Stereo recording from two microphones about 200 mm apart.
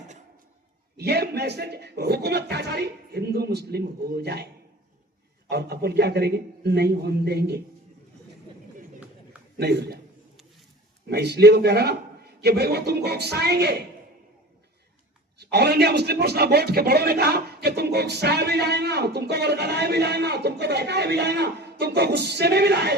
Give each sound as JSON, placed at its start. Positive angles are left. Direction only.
{"t": 0.9, "sound": "a man's voice", "side_deg": -55}
{"t": 5.5, "sound": "a man's voice", "side_deg": -55}
{"t": 9.6, "sound": "a man's voice", "side_deg": -55}
{"t": 11.1, "sound": "a man's voice", "side_deg": -55}
{"t": 15.4, "sound": "a man's voice", "side_deg": -55}